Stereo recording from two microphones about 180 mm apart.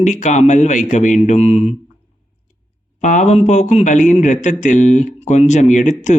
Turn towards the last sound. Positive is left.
turn(degrees=45)  # may be behind; listen again after turning